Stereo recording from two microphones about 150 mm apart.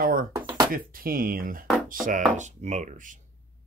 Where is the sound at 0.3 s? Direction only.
25° right (ahead or behind).